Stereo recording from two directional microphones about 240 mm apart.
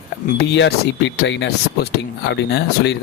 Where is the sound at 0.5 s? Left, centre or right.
Left.